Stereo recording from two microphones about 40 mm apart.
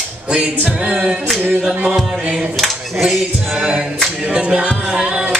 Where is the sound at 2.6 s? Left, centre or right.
Centre.